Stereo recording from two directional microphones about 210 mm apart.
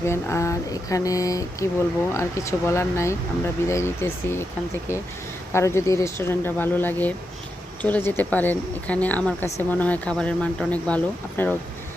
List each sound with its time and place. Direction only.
0.0 s speech: 10° left (ahead or behind)
5.5 s speech: 15° left (ahead or behind)